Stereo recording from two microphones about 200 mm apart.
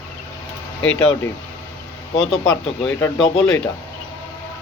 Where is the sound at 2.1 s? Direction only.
30° left (ahead or behind).